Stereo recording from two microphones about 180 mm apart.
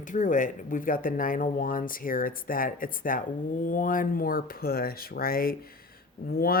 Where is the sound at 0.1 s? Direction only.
45° left (ahead or behind).